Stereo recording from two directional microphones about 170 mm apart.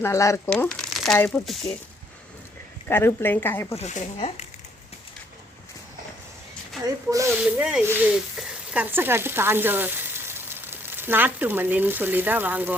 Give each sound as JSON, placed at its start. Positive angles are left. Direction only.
{"t": 0.0, "sound": "speech", "side_deg": 15}
{"t": 0.5, "sound": "speech", "side_deg": 5}
{"t": 2.9, "sound": "speech", "side_deg": 15}
{"t": 3.8, "sound": "speech", "side_deg": 40}
{"t": 6.8, "sound": "speech", "side_deg": -20}
{"t": 7.4, "sound": "speech", "side_deg": -5}